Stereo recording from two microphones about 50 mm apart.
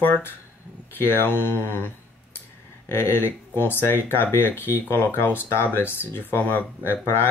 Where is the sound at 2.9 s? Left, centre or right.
Left.